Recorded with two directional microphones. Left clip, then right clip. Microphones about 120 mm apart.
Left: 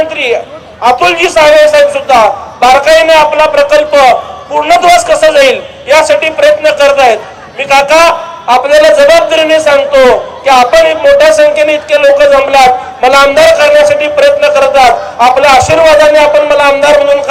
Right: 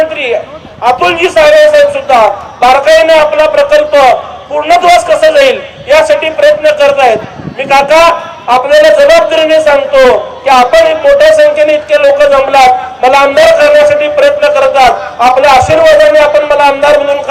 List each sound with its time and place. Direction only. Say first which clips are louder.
0.0 s a man's voice: even; 35° left (ahead or behind)